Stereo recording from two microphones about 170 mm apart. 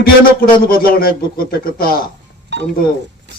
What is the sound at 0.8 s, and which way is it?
A man's voice, 60° left (ahead or behind).